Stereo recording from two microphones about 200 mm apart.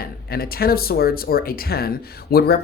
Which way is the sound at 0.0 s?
50° left (ahead or behind).